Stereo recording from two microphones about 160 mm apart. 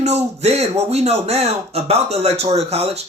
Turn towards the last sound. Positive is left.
turn(degrees=-40)  # may be behind; listen again after turning